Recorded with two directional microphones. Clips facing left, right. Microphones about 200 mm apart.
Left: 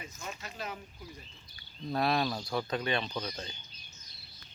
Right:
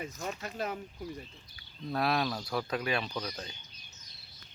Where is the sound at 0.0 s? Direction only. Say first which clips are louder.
Right 6 dB; 40° right (ahead or behind).